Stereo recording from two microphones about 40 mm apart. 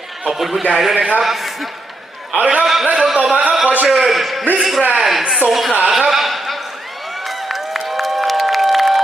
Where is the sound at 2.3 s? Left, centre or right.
Right.